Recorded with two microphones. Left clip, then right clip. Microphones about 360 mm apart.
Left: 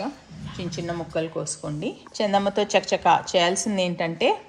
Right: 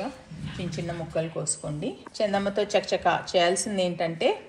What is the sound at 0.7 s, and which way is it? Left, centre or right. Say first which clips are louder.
A woman's voice: left 3 dB; left.